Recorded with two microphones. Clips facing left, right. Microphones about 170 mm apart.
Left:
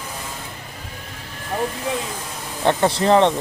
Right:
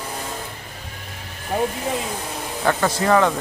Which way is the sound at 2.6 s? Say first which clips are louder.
Left 3 dB; 25° left (ahead or behind).